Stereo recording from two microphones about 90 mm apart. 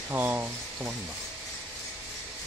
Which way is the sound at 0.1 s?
20° right (ahead or behind).